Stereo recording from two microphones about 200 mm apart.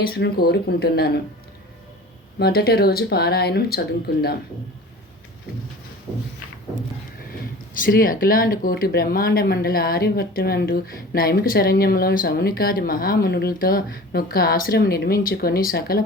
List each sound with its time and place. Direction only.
0.0 s speech: 50° left (ahead or behind)
2.4 s speech: 50° left (ahead or behind)
7.7 s speech: 45° left (ahead or behind)